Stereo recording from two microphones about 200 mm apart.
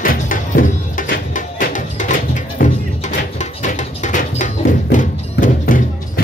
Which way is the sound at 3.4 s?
35° left (ahead or behind).